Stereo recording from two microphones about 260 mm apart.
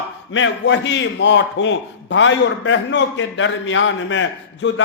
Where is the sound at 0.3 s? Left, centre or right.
Left.